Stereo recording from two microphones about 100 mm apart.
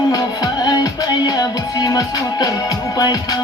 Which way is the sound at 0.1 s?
35° left (ahead or behind).